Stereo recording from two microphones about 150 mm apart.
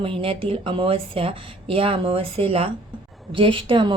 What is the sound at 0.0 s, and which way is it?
A woman's voice, 35° right (ahead or behind).